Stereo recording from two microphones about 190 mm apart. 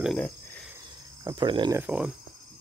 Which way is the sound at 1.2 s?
20° right (ahead or behind).